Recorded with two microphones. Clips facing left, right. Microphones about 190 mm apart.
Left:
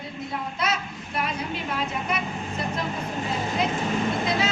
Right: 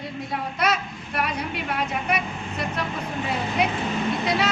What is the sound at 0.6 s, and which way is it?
Speech, 65° right (ahead or behind).